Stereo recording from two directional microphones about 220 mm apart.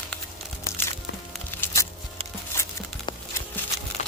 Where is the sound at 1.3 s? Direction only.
10° left (ahead or behind).